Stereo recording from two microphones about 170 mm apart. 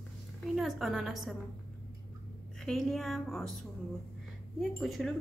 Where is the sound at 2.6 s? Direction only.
Centre (ahead or behind).